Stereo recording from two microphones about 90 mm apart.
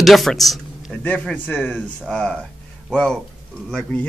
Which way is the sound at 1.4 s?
20° left (ahead or behind).